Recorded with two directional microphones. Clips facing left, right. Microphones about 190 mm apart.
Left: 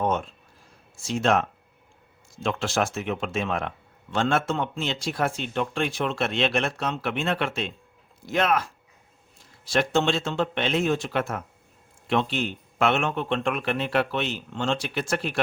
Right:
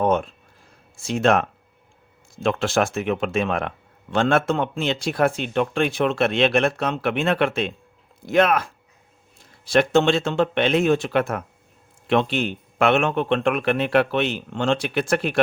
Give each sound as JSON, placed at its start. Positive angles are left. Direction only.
{"t": 0.0, "sound": "a sound", "side_deg": -60}
{"t": 0.9, "sound": "speech", "side_deg": -60}
{"t": 9.6, "sound": "speech", "side_deg": -60}